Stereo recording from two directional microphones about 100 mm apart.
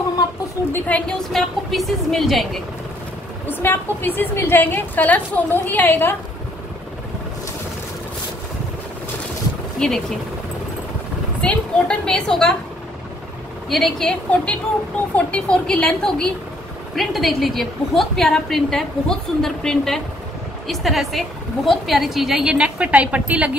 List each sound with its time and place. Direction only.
0.7 s a woman's voice: 15° left (ahead or behind)
3.4 s a woman's voice: 20° left (ahead or behind)
9.8 s speech: 5° left (ahead or behind)
11.4 s a woman's voice: 10° left (ahead or behind)
13.7 s a woman's voice: centre (ahead or behind); by 23.5 s 15° right (ahead or behind)